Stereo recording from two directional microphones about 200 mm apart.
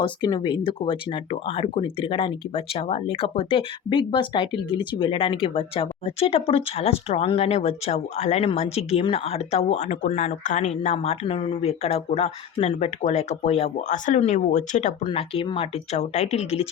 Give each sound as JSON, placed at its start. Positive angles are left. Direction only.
{"t": 0.0, "sound": "speech", "side_deg": 20}